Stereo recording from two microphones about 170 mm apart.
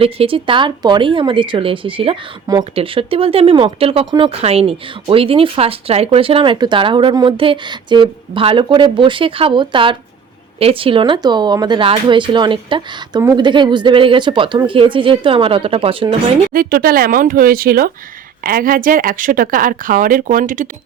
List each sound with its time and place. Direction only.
0.0 s speech: 35° right (ahead or behind)
16.5 s speech: 55° right (ahead or behind)